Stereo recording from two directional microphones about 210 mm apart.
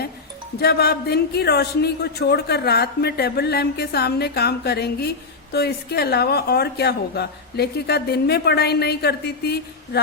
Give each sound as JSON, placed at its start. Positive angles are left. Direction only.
{"t": 0.6, "sound": "speech", "side_deg": 50}